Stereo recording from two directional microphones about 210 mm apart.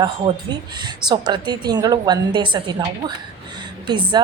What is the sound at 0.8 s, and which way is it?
A woman's voice, 20° right (ahead or behind).